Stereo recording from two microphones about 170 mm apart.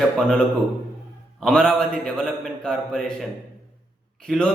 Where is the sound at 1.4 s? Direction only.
5° left (ahead or behind).